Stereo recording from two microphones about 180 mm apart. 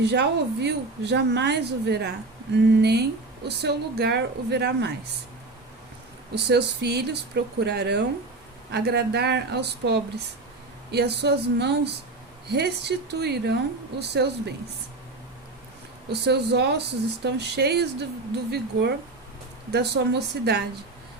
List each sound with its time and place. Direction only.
0.0 s a woman's voice: 70° right (ahead or behind)
6.3 s a woman's voice: 65° right (ahead or behind)
16.0 s a woman's voice: 70° right (ahead or behind)